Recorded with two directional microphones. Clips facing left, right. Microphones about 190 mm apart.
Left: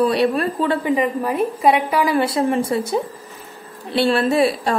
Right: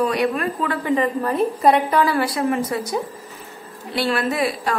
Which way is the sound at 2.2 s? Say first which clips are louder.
Left 2 dB; 25° left (ahead or behind).